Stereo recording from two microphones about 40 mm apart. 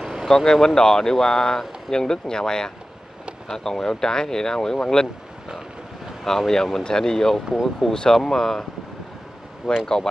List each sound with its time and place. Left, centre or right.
0.0 s vehicle: centre
0.5 s speech: centre
6.2 s speech: centre
9.6 s speech: centre